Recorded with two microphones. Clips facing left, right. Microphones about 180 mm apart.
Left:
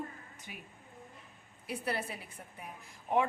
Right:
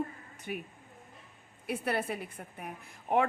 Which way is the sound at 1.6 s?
60° right (ahead or behind).